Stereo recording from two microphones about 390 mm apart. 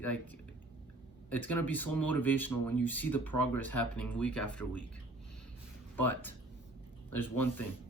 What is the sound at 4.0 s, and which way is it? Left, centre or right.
Speech, centre.